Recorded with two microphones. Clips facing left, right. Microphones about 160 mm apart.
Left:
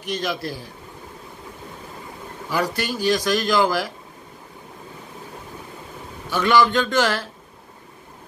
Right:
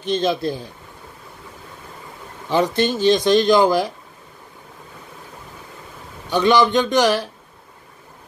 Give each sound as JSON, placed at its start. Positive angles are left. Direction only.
{"t": 0.0, "sound": "speech", "side_deg": -25}
{"t": 2.5, "sound": "speech", "side_deg": -25}
{"t": 6.3, "sound": "speech", "side_deg": -20}